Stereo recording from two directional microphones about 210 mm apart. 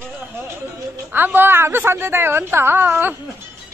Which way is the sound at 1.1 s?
10° right (ahead or behind).